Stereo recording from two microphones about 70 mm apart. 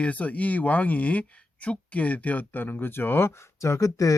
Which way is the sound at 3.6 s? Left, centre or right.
Left.